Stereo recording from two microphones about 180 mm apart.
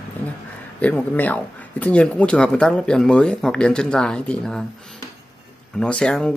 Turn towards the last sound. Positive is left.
turn(degrees=5)  # may be behind; listen again after turning